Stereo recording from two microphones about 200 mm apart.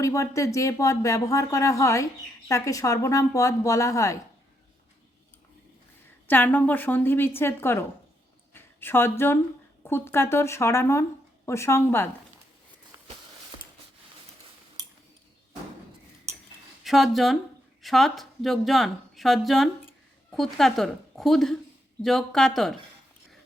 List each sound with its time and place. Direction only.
0.0 s speech: 15° left (ahead or behind)
6.2 s speech: 10° left (ahead or behind)
16.8 s speech: centre (ahead or behind)